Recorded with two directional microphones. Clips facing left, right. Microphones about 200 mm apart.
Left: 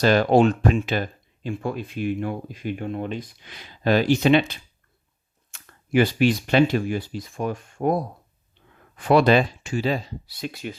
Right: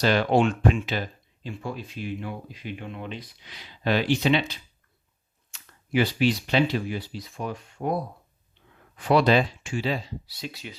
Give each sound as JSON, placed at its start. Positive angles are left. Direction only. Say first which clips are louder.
{"t": 0.0, "sound": "speech", "louder": "left 4 dB", "side_deg": 45}
{"t": 9.0, "sound": "speech", "louder": "left 3 dB", "side_deg": 50}